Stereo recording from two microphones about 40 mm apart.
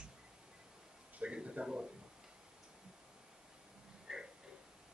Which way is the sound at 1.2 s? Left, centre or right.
Right.